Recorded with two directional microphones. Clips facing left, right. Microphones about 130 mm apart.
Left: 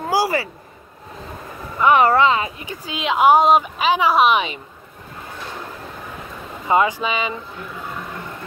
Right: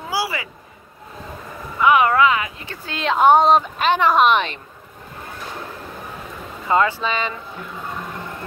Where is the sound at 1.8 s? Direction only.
35° left (ahead or behind).